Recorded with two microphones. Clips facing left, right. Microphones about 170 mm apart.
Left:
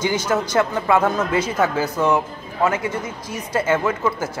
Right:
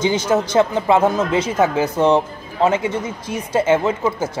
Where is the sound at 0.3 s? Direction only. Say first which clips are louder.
Right 4 dB; 25° right (ahead or behind).